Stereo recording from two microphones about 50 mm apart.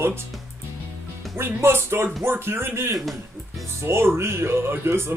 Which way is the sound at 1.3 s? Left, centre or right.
Right.